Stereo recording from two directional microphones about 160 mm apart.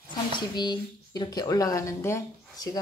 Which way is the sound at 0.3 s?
25° left (ahead or behind).